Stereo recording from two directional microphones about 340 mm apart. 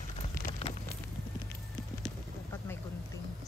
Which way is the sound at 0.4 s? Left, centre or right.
Centre.